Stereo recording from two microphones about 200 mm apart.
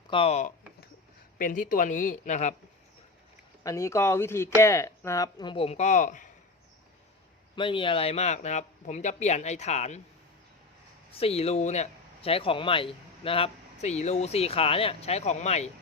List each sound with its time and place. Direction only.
0.1 s speech: 30° left (ahead or behind)
3.6 s speech: 15° left (ahead or behind); by 6.2 s 40° left (ahead or behind)
7.5 s speech: 25° left (ahead or behind)
11.1 s speech: 30° left (ahead or behind)